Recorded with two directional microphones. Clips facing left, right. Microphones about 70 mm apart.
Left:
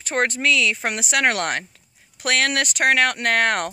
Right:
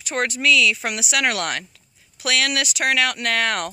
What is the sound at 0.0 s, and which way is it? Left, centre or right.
Speech, left.